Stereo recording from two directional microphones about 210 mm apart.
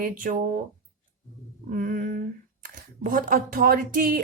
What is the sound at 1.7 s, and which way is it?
Speech, 40° right (ahead or behind).